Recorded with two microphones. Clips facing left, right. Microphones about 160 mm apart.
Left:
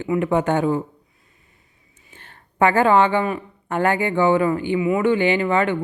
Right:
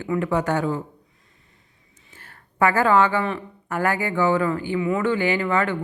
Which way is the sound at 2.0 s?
15° left (ahead or behind).